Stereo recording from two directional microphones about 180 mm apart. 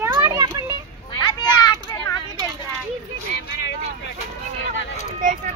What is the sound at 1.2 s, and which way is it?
Children playing, 25° left (ahead or behind).